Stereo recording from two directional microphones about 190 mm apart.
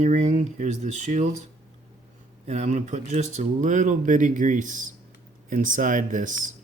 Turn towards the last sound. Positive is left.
turn(degrees=-45)  # may be behind; listen again after turning